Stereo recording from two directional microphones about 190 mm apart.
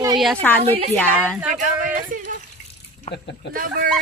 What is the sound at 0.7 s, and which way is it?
Speech, 30° right (ahead or behind).